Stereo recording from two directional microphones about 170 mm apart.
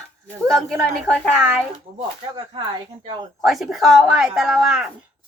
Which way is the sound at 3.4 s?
Centre (ahead or behind).